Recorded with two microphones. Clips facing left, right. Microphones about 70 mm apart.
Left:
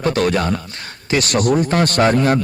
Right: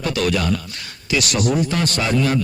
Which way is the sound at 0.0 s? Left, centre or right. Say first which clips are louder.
Left 4 dB; left.